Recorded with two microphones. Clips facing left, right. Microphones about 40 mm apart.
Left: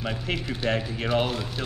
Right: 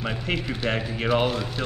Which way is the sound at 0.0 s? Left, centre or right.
Centre.